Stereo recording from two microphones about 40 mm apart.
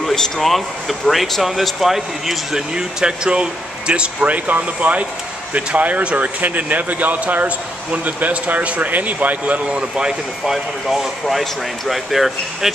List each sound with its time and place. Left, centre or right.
0.0 s a sound: centre
0.5 s speech: centre
2.7 s speech: centre; by 9.6 s right
9.7 s speech: right
10.4 s speech: centre